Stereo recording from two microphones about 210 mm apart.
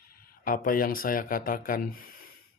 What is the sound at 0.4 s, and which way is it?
Speech, 40° left (ahead or behind).